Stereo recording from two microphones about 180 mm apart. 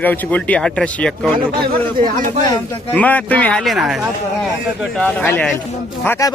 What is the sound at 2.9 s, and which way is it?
Speech, 10° left (ahead or behind).